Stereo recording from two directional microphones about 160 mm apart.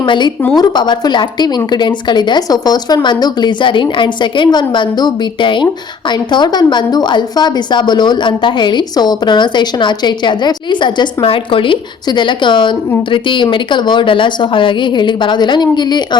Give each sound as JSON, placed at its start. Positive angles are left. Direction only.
{"t": 0.0, "sound": "a woman's voice", "side_deg": 30}